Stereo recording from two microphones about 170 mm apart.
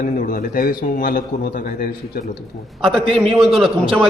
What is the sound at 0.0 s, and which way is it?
A man's voice, 55° left (ahead or behind).